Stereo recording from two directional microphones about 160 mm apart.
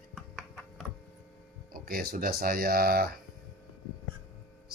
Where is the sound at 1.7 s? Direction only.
70° right (ahead or behind).